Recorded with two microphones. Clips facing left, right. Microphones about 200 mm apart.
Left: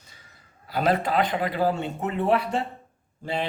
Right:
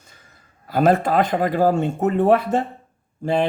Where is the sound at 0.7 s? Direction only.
45° right (ahead or behind).